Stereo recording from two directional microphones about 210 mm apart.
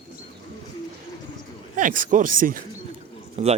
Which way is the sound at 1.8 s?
40° right (ahead or behind).